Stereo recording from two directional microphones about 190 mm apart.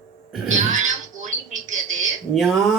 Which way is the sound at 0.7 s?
40° right (ahead or behind).